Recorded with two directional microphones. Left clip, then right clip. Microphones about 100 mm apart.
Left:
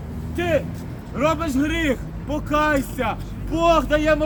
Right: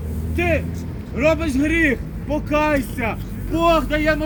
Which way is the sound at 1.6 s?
15° left (ahead or behind).